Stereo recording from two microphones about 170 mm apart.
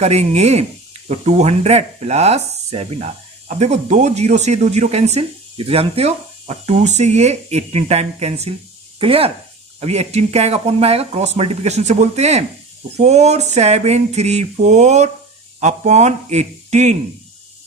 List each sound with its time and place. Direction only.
0.0 s speech: 40° right (ahead or behind)